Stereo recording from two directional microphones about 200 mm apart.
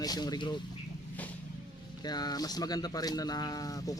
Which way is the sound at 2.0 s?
20° left (ahead or behind).